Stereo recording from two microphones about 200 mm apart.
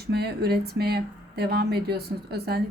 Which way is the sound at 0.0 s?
55° right (ahead or behind).